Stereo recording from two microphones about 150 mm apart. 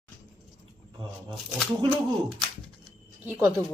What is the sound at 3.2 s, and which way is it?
Speech, 20° right (ahead or behind).